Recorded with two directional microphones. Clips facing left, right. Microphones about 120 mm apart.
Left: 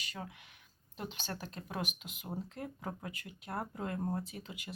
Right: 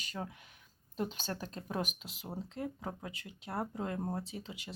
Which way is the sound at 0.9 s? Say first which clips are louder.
Right 5 dB; 40° right (ahead or behind).